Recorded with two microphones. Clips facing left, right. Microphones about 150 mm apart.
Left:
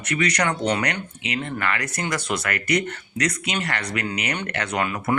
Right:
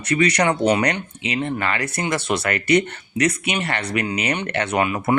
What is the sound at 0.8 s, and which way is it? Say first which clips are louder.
Speech: right 5 dB; 30° right (ahead or behind).